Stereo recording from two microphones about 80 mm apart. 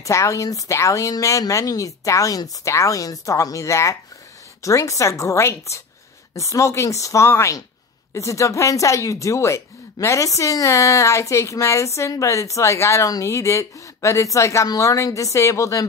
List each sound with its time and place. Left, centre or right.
0.0 s speech: left